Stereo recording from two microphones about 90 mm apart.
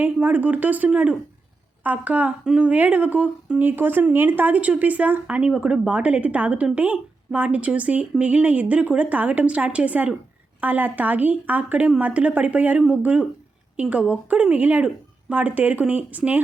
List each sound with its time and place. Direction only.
0.0 s speech: 20° right (ahead or behind)